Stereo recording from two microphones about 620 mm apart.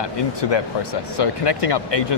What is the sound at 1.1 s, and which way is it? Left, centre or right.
Speech, left.